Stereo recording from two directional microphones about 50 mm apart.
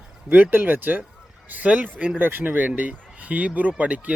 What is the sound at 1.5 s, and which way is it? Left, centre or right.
Speech, right.